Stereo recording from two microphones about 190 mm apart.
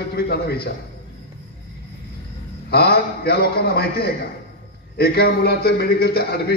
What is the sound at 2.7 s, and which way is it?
A man's voice, 55° left (ahead or behind).